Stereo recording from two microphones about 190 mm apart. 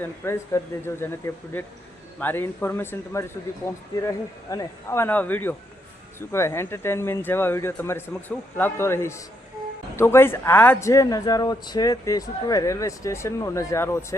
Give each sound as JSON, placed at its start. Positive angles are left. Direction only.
{"t": 0.0, "sound": "a man's voice", "side_deg": 15}